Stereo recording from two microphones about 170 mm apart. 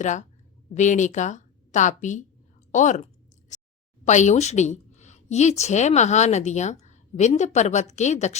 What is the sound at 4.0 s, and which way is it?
A woman's voice, 45° left (ahead or behind).